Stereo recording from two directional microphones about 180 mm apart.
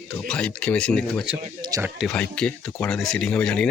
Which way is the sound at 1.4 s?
25° right (ahead or behind).